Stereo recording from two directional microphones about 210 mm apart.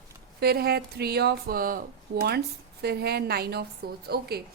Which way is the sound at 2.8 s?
50° right (ahead or behind).